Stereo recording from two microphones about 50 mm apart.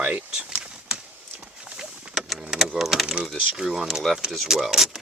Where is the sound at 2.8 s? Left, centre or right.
Centre.